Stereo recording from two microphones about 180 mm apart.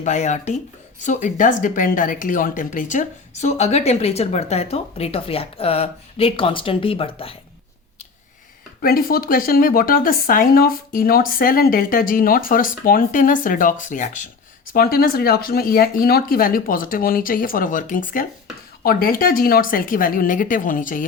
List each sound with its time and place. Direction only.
0.0 s speech: 40° left (ahead or behind)
8.8 s speech: 55° left (ahead or behind)
14.7 s speech: 55° left (ahead or behind)